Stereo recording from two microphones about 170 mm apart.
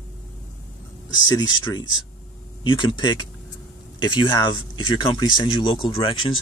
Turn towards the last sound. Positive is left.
turn(degrees=30)  # may be behind; listen again after turning